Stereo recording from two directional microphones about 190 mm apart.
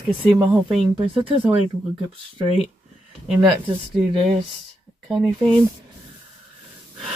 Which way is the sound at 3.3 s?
Centre (ahead or behind).